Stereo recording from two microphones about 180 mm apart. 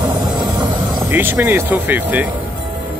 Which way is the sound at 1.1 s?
10° right (ahead or behind).